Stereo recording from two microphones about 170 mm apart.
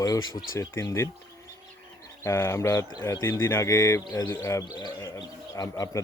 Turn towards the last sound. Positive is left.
turn(degrees=20)  # may be behind; listen again after turning